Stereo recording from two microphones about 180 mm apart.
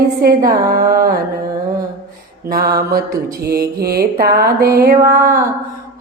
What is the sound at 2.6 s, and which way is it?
Mantra, 55° right (ahead or behind).